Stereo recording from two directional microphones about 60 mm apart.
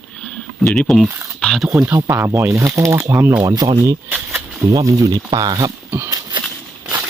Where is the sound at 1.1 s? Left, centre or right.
Right.